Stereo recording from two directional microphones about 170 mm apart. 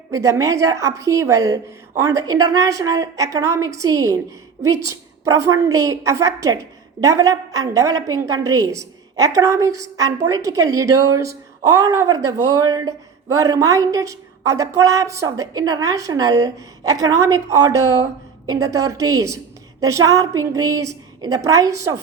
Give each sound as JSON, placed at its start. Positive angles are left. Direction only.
{"t": 0.1, "sound": "speech", "side_deg": -20}